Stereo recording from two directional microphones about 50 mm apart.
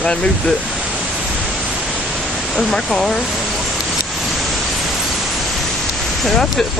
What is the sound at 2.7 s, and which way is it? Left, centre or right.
Speech, centre.